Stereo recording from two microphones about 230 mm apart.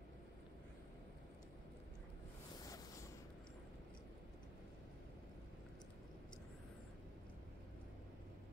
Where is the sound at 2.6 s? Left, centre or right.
Centre.